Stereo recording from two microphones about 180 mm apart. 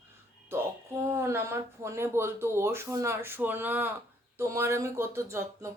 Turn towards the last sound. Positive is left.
turn(degrees=-15)  # may be behind; listen again after turning